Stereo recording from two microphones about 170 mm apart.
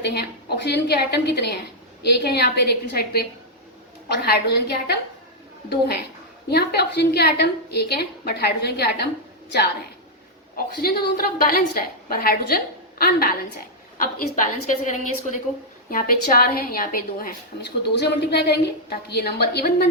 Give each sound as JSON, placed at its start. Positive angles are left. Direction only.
{"t": 0.0, "sound": "a woman's voice", "side_deg": 75}
{"t": 6.5, "sound": "a woman's voice", "side_deg": 70}
{"t": 10.8, "sound": "a woman's voice", "side_deg": 65}